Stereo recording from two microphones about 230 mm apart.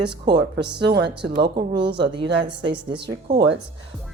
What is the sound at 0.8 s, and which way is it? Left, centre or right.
Speech, right.